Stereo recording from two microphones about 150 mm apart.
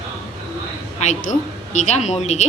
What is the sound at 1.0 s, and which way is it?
A woman's voice, 55° left (ahead or behind).